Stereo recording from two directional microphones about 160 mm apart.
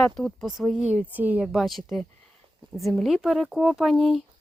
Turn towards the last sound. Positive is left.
turn(degrees=0)  # may be behind; listen again after turning